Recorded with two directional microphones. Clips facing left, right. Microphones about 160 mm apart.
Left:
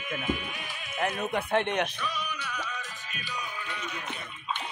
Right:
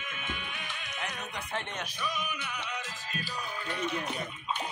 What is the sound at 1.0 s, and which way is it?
Speech, 55° left (ahead or behind).